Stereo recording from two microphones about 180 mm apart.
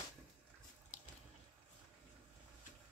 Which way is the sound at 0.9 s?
40° left (ahead or behind).